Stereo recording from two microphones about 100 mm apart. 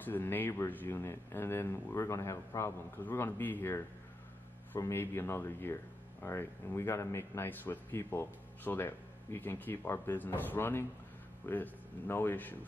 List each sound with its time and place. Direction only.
0.0 s speech: 20° left (ahead or behind)